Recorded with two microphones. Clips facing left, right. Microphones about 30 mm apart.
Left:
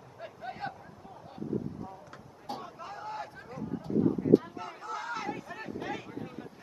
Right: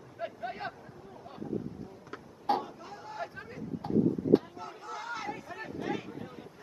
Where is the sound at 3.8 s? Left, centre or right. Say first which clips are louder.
Right 2 dB; right.